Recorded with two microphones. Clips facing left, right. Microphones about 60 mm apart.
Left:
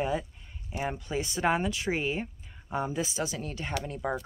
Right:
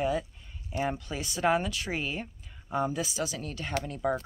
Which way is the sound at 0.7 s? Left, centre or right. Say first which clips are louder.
Right 2 dB; centre.